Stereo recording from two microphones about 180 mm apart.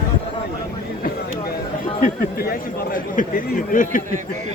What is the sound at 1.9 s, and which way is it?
Speech, 50° left (ahead or behind).